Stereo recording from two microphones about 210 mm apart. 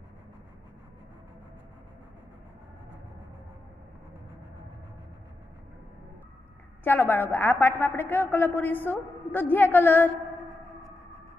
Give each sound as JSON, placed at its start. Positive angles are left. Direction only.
{"t": 6.8, "sound": "a woman's voice", "side_deg": 10}